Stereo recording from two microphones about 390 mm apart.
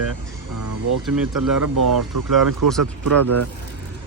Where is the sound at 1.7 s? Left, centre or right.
Right.